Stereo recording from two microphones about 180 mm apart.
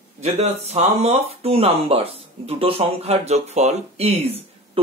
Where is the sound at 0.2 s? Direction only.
35° right (ahead or behind).